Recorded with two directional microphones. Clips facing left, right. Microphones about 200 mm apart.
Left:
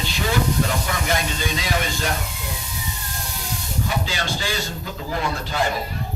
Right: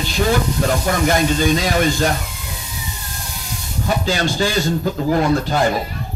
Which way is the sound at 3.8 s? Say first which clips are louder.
Right 8 dB; 45° right (ahead or behind).